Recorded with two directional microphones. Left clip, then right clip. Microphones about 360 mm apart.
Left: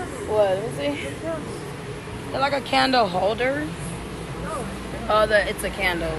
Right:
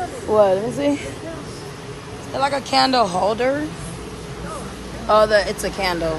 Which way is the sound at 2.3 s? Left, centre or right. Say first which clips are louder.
Right 3 dB; centre.